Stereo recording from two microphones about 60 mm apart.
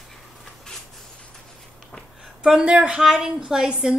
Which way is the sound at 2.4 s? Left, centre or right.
Centre.